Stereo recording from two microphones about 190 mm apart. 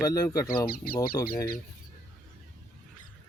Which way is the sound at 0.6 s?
50° left (ahead or behind).